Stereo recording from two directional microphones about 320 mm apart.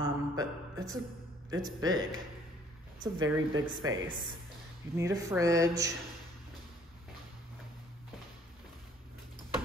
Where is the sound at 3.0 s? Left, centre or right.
Centre.